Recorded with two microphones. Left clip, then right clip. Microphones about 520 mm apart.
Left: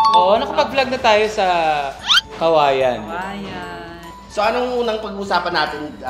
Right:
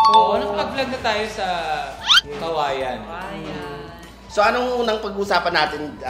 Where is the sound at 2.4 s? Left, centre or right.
Left.